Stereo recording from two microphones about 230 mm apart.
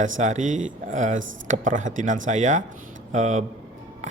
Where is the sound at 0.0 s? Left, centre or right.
Right.